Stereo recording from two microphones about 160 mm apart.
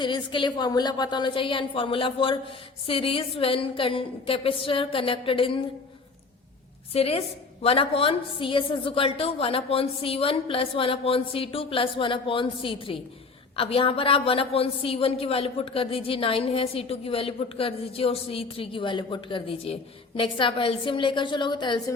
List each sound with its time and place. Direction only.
0.0 s a woman's voice: 30° left (ahead or behind)
6.9 s a woman's voice: 40° left (ahead or behind)